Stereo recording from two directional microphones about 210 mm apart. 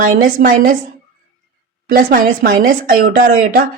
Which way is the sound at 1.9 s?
40° right (ahead or behind).